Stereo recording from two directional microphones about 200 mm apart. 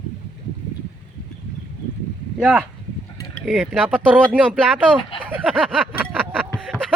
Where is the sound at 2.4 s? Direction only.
5° right (ahead or behind).